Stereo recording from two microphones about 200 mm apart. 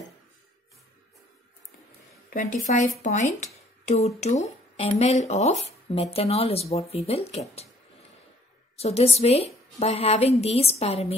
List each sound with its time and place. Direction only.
2.3 s speech: 35° left (ahead or behind)
8.7 s speech: 30° left (ahead or behind)